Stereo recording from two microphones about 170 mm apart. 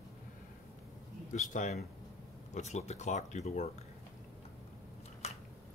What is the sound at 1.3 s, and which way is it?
Speech, 50° left (ahead or behind).